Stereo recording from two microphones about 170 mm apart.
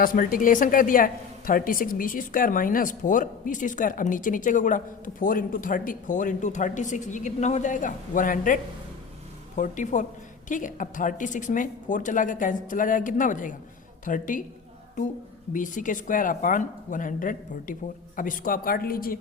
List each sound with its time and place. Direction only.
0.0 s a woman's voice: 55° left (ahead or behind)
9.6 s a woman's voice: 45° left (ahead or behind)